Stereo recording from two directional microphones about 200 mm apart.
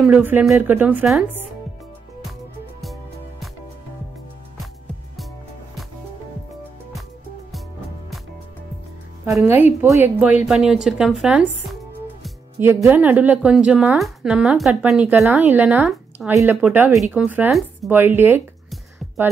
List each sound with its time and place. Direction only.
0.0 s a woman's voice: 10° right (ahead or behind)
9.8 s speech: 15° right (ahead or behind)
12.5 s a woman's voice: 10° right (ahead or behind)